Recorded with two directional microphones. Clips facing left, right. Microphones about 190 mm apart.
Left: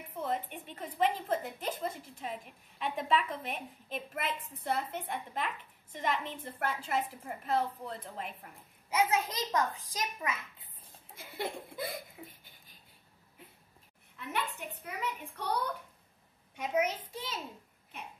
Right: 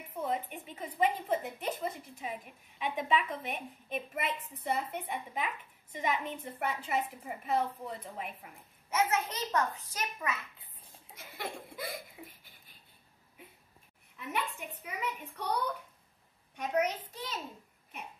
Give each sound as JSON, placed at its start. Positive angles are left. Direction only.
{"t": 0.2, "sound": "a woman's voice", "side_deg": -5}
{"t": 8.9, "sound": "a child's voice", "side_deg": 15}
{"t": 11.1, "sound": "a sound", "side_deg": 25}
{"t": 12.2, "sound": "a woman's voice", "side_deg": 0}
{"t": 14.1, "sound": "a woman's voice", "side_deg": -10}
{"t": 16.5, "sound": "a child's voice", "side_deg": 10}